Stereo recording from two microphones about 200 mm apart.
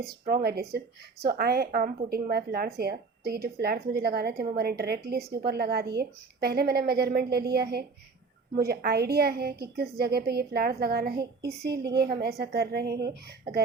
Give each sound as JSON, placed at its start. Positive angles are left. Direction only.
{"t": 0.0, "sound": "speech", "side_deg": -50}